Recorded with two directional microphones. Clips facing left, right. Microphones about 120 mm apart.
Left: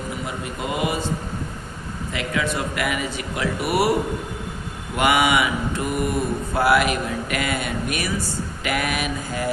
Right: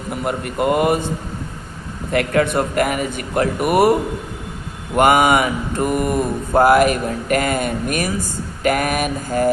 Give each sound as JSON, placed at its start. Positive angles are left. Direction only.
{"t": 0.1, "sound": "speech", "side_deg": -55}
{"t": 2.1, "sound": "mantra", "side_deg": -55}
{"t": 4.9, "sound": "mantra", "side_deg": -45}